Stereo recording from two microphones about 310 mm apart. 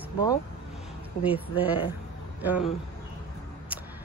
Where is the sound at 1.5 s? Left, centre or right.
Centre.